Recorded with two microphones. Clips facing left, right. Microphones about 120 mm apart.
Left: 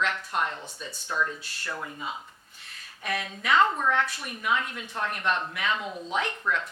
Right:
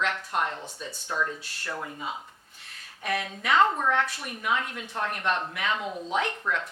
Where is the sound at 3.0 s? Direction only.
50° right (ahead or behind).